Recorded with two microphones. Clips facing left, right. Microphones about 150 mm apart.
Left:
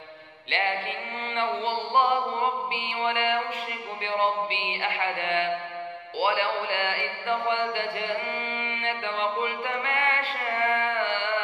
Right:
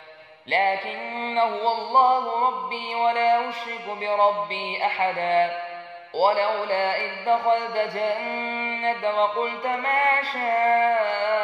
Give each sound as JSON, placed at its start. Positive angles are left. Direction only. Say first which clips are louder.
{"t": 0.5, "sound": "mantra", "louder": "right 6 dB", "side_deg": -40}